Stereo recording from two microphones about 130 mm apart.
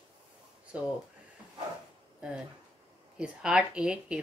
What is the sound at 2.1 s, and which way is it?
Speech, 5° right (ahead or behind).